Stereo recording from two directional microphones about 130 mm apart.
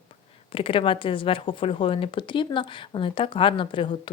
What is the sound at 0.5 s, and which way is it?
Speech, 45° left (ahead or behind).